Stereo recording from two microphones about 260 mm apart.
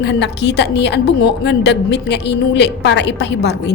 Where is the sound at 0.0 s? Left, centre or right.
Left.